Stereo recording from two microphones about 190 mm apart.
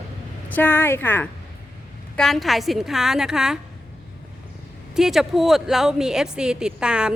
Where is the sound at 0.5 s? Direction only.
10° left (ahead or behind).